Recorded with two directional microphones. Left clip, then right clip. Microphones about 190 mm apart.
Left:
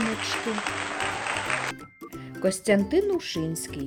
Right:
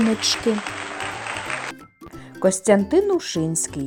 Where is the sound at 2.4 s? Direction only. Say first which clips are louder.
Right 6 dB; 10° right (ahead or behind).